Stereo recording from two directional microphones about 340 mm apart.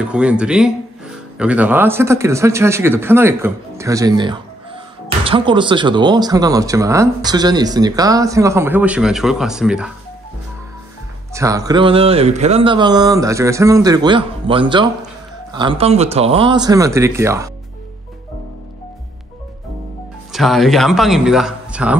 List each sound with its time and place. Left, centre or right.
0.0 s speech: centre
11.3 s speech: centre
20.3 s speech: centre